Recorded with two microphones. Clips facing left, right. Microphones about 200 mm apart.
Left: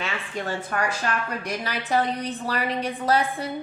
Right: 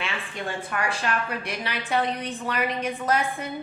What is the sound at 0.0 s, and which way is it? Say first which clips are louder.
A woman's voice: left 2 dB; 40° left (ahead or behind).